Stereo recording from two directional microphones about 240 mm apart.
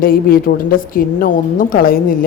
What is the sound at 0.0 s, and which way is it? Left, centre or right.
A woman's voice, left.